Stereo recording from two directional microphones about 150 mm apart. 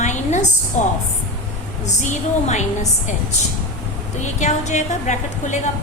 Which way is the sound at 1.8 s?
50° left (ahead or behind).